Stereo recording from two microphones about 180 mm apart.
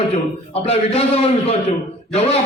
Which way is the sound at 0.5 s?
35° left (ahead or behind).